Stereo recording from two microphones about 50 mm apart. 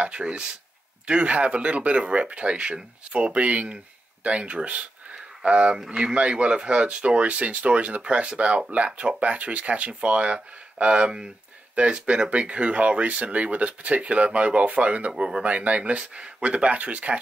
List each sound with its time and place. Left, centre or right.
0.0 s speech: right
5.1 s a sound: right
5.9 s speech: centre